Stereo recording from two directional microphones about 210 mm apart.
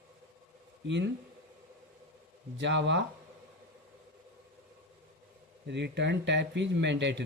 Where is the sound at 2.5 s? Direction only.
60° right (ahead or behind).